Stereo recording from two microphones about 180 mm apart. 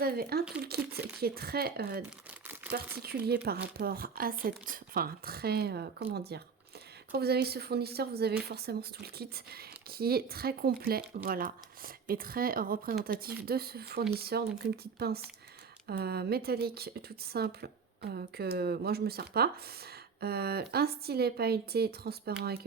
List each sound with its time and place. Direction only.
0.0 s speech: 60° right (ahead or behind)
2.6 s crumpling: 10° right (ahead or behind)
3.0 s speech: 60° right (ahead or behind)